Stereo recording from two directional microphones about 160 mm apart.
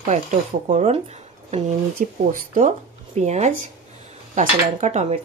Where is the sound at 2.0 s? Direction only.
55° right (ahead or behind).